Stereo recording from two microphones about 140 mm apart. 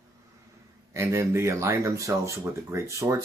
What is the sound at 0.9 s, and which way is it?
Speech, 20° right (ahead or behind).